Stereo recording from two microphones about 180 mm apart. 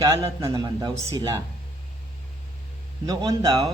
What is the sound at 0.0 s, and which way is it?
Speech, 20° right (ahead or behind).